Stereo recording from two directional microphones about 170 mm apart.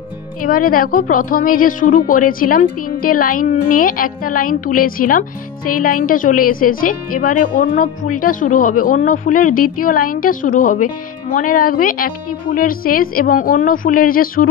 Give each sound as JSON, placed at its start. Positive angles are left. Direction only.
{"t": 0.4, "sound": "a woman's voice", "side_deg": 55}